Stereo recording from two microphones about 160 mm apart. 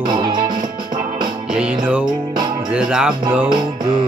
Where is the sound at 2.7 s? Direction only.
5° right (ahead or behind).